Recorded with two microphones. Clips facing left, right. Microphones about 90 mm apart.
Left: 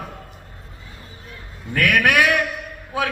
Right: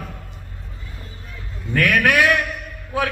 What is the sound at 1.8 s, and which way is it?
A man's voice, 20° left (ahead or behind).